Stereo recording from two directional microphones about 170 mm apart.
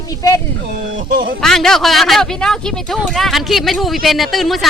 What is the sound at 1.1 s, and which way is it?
Speech, 60° right (ahead or behind).